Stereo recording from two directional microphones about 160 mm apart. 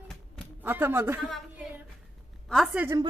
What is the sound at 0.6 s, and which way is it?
Speech, 15° right (ahead or behind).